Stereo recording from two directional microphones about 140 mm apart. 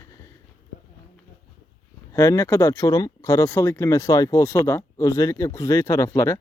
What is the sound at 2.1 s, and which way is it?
A man's voice, 20° left (ahead or behind).